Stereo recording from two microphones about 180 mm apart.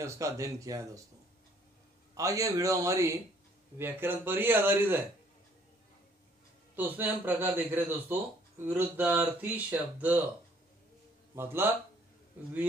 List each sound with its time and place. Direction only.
0.0 s speech: 15° right (ahead or behind)
2.1 s speech: 20° right (ahead or behind)
6.7 s speech: 10° right (ahead or behind)
11.3 s speech: 15° right (ahead or behind)